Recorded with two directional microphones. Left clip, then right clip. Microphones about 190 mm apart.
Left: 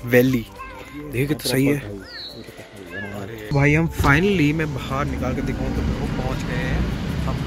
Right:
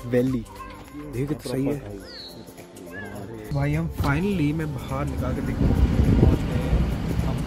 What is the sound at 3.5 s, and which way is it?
Speech, 35° left (ahead or behind).